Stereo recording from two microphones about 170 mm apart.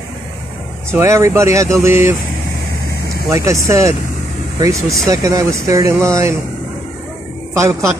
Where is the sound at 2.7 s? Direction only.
70° left (ahead or behind).